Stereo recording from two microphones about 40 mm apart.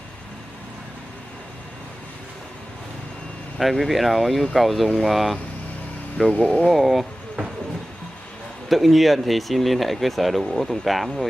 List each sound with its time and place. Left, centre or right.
3.5 s speech: centre
6.2 s speech: left
6.6 s speech: centre
8.6 s speech: centre